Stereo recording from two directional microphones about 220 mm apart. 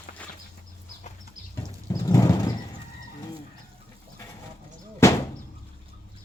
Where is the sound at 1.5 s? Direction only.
15° left (ahead or behind).